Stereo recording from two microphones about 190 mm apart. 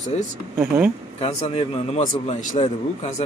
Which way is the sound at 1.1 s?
30° left (ahead or behind).